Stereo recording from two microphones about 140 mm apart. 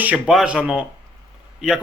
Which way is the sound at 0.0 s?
10° right (ahead or behind).